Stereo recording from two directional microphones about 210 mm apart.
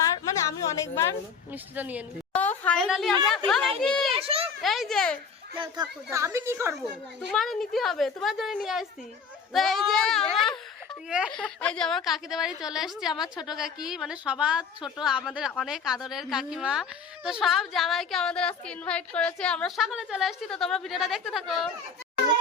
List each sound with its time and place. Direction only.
0.4 s speech: 15° left (ahead or behind)
1.7 s a woman's voice: 5° right (ahead or behind)
2.4 s a sound: 5° left (ahead or behind)
3.2 s a woman's voice: centre (ahead or behind)
4.1 s a sound: 25° right (ahead or behind)
4.6 s a woman's voice: centre (ahead or behind)
5.5 s a woman's voice: 20° right (ahead or behind)
7.3 s a woman's voice: centre (ahead or behind)
13.2 s a woman's voice: 20° left (ahead or behind)
13.5 s a woman's voice: centre (ahead or behind)